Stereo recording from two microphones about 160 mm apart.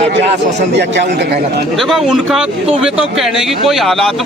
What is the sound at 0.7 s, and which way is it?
Speech, 90° right.